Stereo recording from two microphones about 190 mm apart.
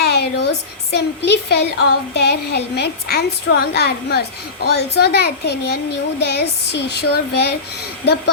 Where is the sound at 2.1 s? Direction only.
60° left (ahead or behind).